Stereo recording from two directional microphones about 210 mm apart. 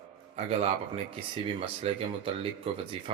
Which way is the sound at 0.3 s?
30° right (ahead or behind).